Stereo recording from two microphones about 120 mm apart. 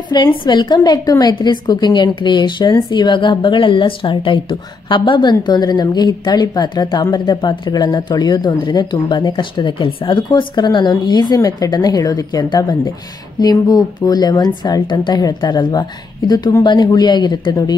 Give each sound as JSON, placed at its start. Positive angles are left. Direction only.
{"t": 0.1, "sound": "a woman's voice", "side_deg": 35}